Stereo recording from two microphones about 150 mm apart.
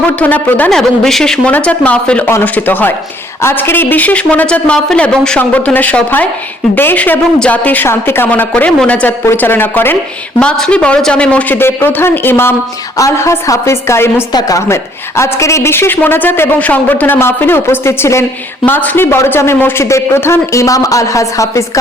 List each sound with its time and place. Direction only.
0.2 s a woman's voice: 10° left (ahead or behind)